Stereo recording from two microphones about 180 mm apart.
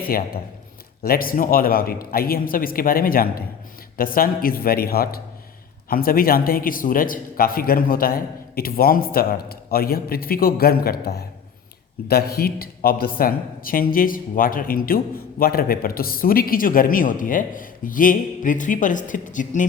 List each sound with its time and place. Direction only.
0.0 s a man's voice: 55° left (ahead or behind)